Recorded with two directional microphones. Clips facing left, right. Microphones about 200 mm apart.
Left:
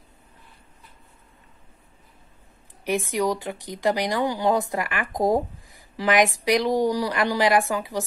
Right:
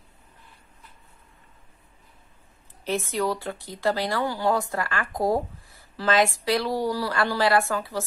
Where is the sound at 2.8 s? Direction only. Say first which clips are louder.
Left 2 dB; 15° left (ahead or behind).